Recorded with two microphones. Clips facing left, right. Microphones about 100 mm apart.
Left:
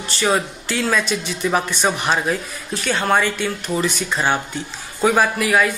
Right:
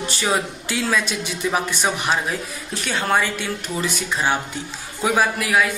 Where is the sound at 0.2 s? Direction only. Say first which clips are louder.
Left 4 dB; 5° right (ahead or behind).